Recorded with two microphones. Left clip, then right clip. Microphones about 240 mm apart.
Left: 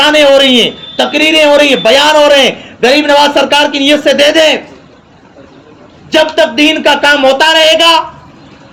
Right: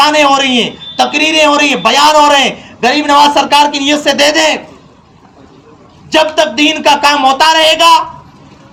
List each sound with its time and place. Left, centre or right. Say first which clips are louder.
0.0 s a man's voice: left 3 dB; right
6.1 s a man's voice: left 1 dB; right